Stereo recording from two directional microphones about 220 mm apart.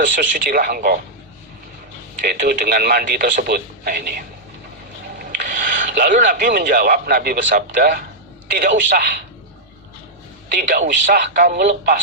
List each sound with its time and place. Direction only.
0.2 s speech: 40° right (ahead or behind)
2.2 s speech: 45° right (ahead or behind)
5.2 s a man's voice: 35° right (ahead or behind)
10.5 s speech: 40° right (ahead or behind)